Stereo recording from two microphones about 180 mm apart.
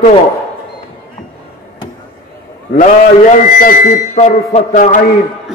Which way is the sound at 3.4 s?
50° left (ahead or behind).